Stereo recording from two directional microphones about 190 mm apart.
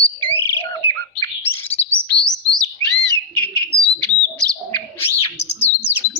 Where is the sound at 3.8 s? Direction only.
5° left (ahead or behind).